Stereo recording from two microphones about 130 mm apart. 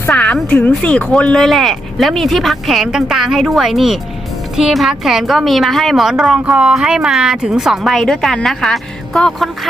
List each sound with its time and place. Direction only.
0.1 s a woman's voice: 5° left (ahead or behind)